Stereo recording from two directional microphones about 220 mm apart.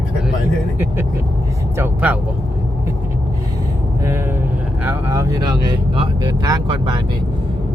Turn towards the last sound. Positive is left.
turn(degrees=-20)  # may be behind; listen again after turning